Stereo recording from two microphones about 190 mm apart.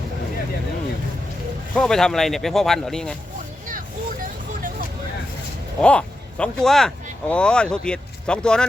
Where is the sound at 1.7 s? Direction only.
5° left (ahead or behind).